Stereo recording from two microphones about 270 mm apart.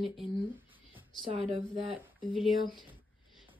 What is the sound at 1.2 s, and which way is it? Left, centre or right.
Speech, centre.